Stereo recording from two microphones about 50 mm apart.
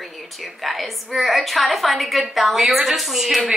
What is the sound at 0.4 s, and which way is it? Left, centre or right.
A woman's voice, centre.